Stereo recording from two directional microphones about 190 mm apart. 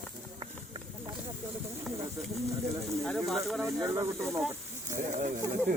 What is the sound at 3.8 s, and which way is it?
Speech, 15° right (ahead or behind).